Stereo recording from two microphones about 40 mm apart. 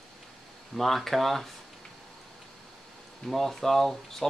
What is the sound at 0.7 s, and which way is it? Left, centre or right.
Speech, centre.